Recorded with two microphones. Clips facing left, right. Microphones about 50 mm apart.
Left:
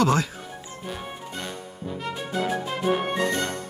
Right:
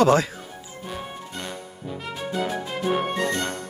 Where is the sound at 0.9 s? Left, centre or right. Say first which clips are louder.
Right 1 dB; centre.